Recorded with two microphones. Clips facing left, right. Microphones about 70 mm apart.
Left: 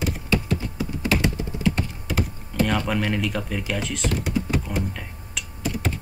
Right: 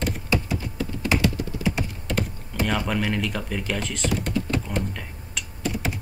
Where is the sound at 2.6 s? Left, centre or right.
Centre.